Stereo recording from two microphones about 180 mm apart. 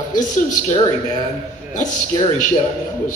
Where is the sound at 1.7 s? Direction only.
45° left (ahead or behind).